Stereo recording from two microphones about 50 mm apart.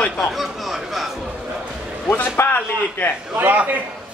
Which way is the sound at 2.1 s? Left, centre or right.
Left.